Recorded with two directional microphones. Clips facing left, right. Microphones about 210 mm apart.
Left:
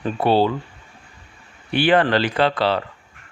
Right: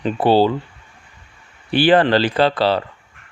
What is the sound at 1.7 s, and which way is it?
Speech, 35° right (ahead or behind).